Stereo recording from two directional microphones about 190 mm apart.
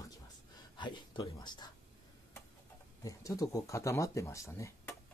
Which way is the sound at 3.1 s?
15° left (ahead or behind).